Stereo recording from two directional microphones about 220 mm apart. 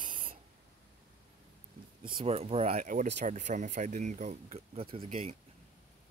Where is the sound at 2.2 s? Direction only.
25° right (ahead or behind).